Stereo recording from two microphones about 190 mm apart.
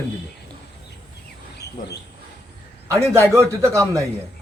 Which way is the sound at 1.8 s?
45° left (ahead or behind).